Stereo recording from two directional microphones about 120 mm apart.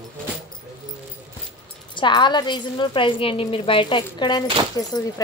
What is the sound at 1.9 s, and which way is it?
A woman's voice, 40° left (ahead or behind).